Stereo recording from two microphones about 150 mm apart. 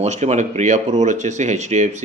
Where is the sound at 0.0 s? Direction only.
50° right (ahead or behind).